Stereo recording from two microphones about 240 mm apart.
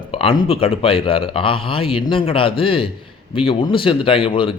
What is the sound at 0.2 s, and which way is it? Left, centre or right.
Speech, left.